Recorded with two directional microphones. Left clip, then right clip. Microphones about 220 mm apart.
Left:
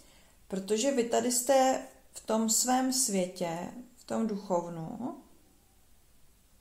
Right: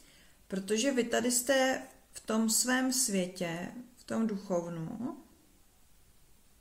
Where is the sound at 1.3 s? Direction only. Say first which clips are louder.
Left 5 dB; 70° right (ahead or behind).